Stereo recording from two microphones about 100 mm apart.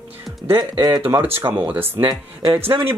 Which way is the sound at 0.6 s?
45° right (ahead or behind).